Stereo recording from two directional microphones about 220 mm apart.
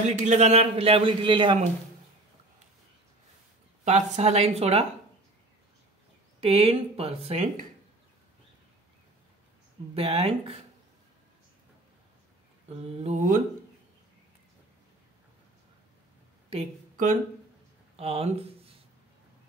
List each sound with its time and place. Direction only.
0.2 s a man's voice: 30° right (ahead or behind)
3.8 s a man's voice: 30° right (ahead or behind)
6.4 s a man's voice: 25° right (ahead or behind)
9.9 s a man's voice: 25° right (ahead or behind)
12.6 s a man's voice: 30° right (ahead or behind)
16.4 s a sound: 30° right (ahead or behind)